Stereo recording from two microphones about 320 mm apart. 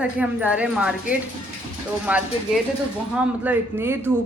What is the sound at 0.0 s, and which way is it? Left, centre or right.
A woman's voice, centre.